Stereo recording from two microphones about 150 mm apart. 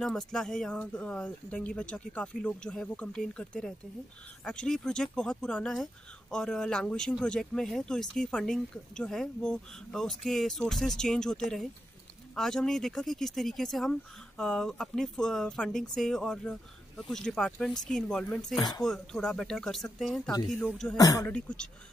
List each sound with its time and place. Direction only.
0.0 s speech: 5° left (ahead or behind)
20.9 s speech: 25° left (ahead or behind)
21.3 s speech: 5° left (ahead or behind)